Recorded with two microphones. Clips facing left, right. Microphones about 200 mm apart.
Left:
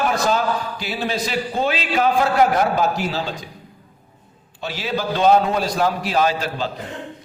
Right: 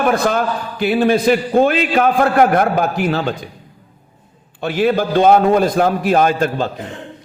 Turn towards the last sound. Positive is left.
turn(degrees=-55)  # may be behind; listen again after turning